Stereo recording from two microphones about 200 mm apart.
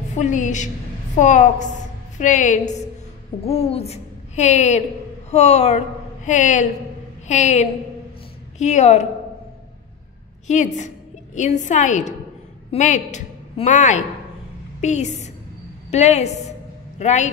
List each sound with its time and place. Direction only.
0.1 s a woman's voice: 40° left (ahead or behind)
10.4 s a woman's voice: 35° left (ahead or behind)